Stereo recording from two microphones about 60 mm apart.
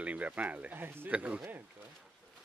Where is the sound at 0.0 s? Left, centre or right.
Right.